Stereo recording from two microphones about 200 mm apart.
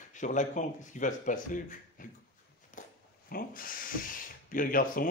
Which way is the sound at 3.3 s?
45° left (ahead or behind).